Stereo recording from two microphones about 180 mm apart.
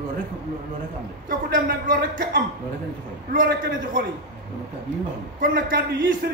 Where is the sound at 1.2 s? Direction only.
55° right (ahead or behind).